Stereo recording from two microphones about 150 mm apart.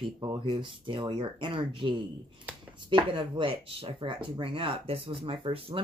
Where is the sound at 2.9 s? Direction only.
35° right (ahead or behind).